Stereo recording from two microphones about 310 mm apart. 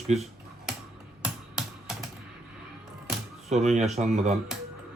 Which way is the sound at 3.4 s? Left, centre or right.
Right.